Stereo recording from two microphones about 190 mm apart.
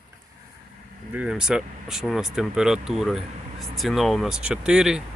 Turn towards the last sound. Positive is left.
turn(degrees=-5)  # may be behind; listen again after turning